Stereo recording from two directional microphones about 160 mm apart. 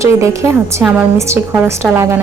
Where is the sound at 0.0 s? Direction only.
20° right (ahead or behind).